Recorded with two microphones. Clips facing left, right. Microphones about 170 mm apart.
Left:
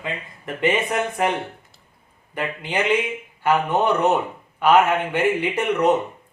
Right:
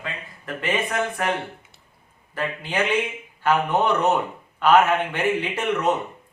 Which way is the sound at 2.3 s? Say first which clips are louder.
Left 1 dB; 15° left (ahead or behind).